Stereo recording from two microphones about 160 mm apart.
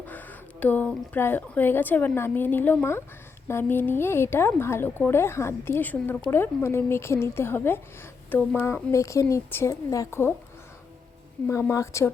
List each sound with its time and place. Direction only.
0.0 s speech: 10° left (ahead or behind)
11.4 s a woman's voice: 20° left (ahead or behind)